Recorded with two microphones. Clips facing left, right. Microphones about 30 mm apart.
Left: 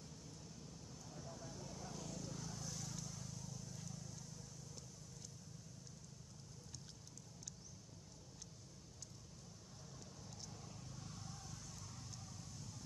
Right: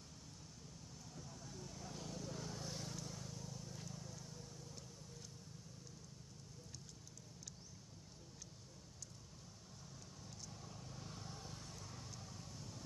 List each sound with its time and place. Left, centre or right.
1.1 s a sound: centre
2.0 s vehicle: centre
10.6 s vehicle: centre; by 11.7 s right
12.1 s vehicle: centre